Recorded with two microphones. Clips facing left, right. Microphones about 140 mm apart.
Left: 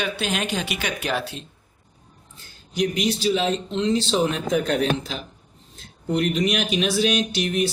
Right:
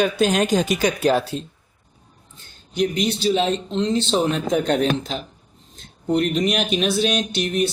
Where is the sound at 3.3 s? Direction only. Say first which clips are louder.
Right 2 dB; 35° right (ahead or behind).